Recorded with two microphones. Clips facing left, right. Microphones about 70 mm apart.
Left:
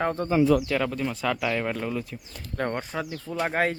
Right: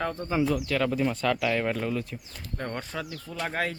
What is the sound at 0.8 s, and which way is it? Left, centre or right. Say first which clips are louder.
Speech: right 2 dB; centre.